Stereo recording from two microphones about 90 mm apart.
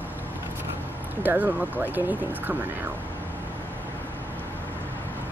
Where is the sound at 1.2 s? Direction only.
20° right (ahead or behind).